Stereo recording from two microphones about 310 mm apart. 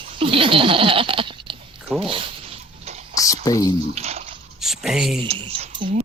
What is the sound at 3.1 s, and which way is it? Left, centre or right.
Speech, centre.